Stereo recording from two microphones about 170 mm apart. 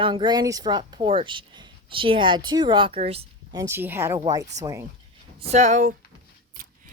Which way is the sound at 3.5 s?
15° right (ahead or behind).